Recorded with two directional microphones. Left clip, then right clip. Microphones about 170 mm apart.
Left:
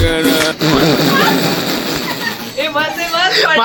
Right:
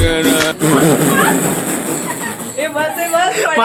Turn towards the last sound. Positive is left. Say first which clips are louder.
# left 2 dB
turn(degrees=5)  # may be behind; listen again after turning